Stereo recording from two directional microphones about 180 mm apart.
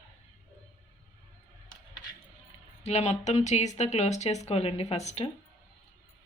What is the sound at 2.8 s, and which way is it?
Speech, 35° left (ahead or behind).